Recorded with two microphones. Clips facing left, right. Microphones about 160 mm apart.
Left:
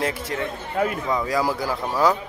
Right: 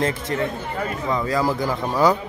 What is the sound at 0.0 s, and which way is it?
A man's voice, 10° left (ahead or behind).